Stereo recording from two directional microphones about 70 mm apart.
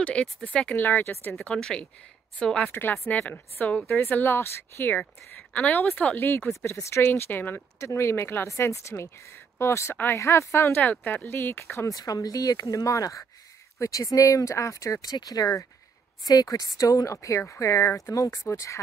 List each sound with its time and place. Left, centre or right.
0.0 s speech: centre
1.4 s speech: centre
2.7 s speech: left
3.8 s speech: left
6.5 s speech: left
10.8 s speech: left
11.9 s speech: left